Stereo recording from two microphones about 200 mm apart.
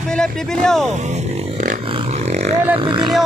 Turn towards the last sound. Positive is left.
turn(degrees=-25)  # may be behind; listen again after turning